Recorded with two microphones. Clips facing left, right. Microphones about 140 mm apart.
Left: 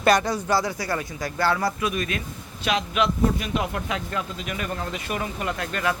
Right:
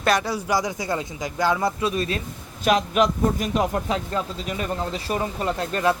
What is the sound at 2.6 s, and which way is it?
Speech, 40° right (ahead or behind).